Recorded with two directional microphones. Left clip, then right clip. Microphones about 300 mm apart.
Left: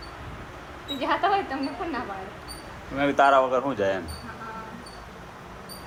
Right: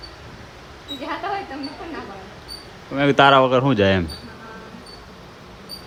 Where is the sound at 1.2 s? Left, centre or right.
Left.